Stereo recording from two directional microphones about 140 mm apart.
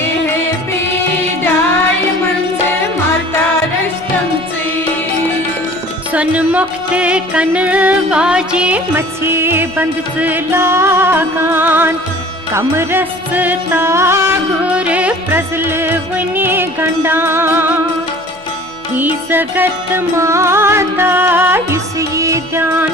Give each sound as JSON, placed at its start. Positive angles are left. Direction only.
{"t": 6.1, "sound": "music", "side_deg": -10}
{"t": 18.9, "sound": "music", "side_deg": -15}